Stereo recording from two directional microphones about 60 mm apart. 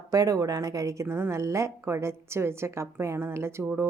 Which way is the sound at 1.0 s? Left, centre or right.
Right.